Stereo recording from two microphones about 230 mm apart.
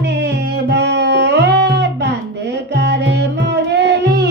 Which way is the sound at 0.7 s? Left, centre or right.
Right.